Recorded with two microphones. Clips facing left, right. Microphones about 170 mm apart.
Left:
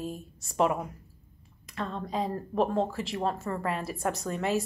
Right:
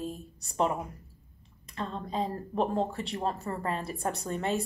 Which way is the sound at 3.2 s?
35° right (ahead or behind).